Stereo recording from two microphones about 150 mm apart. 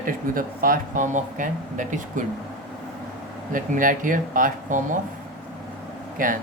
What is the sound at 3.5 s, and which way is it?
Speech, 65° right (ahead or behind).